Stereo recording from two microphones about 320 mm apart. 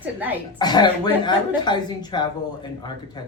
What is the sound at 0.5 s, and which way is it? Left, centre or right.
Speech, centre.